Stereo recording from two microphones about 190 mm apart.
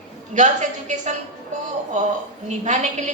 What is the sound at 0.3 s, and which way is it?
Speech, 40° right (ahead or behind).